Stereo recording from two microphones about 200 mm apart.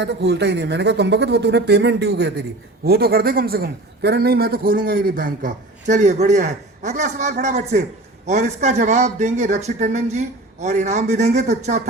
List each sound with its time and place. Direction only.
0.0 s a man's voice: 60° right (ahead or behind); by 11.8 s 35° right (ahead or behind)